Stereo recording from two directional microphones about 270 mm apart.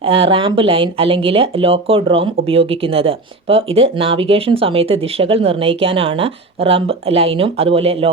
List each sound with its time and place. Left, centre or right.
0.0 s speech: centre